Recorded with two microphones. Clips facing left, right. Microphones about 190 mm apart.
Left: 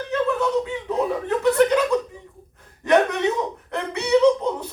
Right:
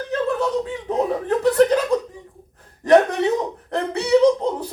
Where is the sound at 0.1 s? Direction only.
35° right (ahead or behind).